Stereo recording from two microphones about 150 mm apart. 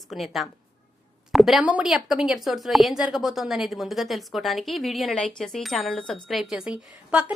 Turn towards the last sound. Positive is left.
turn(degrees=-5)  # may be behind; listen again after turning